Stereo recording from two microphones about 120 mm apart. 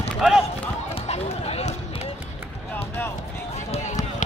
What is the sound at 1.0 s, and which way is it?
Chatter, 60° left (ahead or behind).